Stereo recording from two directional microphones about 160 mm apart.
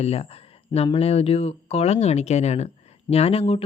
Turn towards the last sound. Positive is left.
turn(degrees=40)  # may be behind; listen again after turning